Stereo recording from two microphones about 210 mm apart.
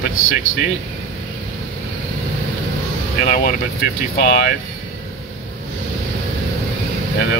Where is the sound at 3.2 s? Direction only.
45° left (ahead or behind).